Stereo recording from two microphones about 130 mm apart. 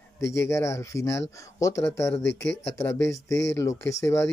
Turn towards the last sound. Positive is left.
turn(degrees=20)  # may be behind; listen again after turning